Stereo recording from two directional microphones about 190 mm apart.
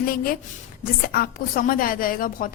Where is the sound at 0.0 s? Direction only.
50° left (ahead or behind).